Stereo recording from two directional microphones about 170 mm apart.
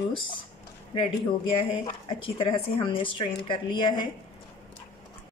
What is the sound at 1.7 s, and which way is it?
A woman's voice, 35° left (ahead or behind).